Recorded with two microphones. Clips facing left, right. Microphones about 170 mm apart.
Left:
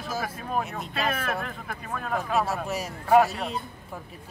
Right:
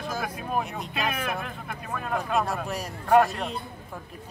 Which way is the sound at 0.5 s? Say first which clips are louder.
Left 1 dB; 5° right (ahead or behind).